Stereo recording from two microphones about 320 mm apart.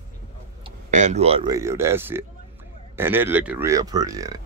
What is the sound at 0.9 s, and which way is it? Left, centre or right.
Speech, right.